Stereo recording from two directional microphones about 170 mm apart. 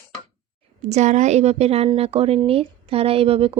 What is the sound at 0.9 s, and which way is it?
A woman's voice, 45° right (ahead or behind).